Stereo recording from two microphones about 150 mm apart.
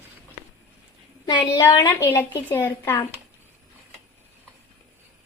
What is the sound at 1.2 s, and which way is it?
Speech, 30° left (ahead or behind).